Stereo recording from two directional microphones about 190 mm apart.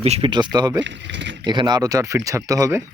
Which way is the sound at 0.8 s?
70° right (ahead or behind).